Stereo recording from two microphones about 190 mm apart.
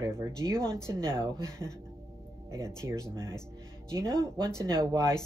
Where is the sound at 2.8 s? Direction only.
15° right (ahead or behind).